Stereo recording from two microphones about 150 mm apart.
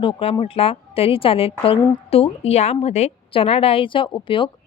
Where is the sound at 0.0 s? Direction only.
35° left (ahead or behind).